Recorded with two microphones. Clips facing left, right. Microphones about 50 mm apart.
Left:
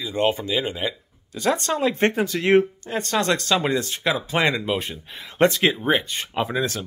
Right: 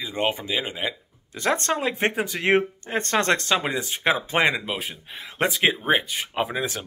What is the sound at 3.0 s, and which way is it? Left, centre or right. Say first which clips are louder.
Speech: even; right.